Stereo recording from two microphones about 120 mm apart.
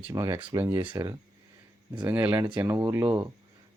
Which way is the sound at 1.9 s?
15° right (ahead or behind).